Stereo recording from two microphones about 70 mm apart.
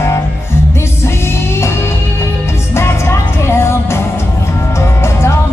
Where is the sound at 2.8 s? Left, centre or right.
Left.